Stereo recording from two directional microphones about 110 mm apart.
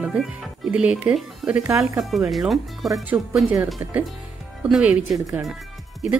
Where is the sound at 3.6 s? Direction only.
15° right (ahead or behind).